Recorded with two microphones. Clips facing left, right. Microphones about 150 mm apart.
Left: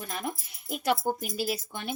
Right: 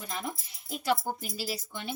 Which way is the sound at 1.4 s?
55° left (ahead or behind).